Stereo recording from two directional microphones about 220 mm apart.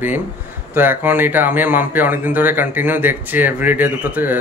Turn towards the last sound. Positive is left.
turn(degrees=-10)  # may be behind; listen again after turning